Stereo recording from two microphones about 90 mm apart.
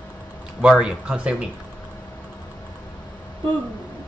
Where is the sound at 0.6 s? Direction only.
10° right (ahead or behind).